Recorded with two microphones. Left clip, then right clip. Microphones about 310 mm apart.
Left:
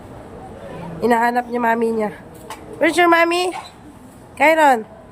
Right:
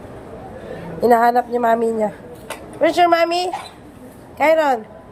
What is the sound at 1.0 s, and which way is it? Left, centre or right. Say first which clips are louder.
Speech: right 3 dB; centre.